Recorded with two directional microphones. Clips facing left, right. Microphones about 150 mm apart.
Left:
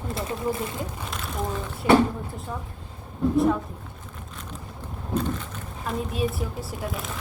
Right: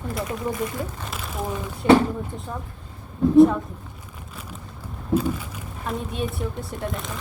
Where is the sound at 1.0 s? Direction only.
Centre (ahead or behind).